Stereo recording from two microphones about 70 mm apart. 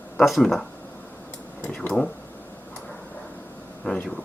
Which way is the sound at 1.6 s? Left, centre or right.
Centre.